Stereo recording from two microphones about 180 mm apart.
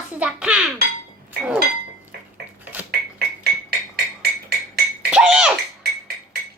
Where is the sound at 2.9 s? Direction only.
60° right (ahead or behind).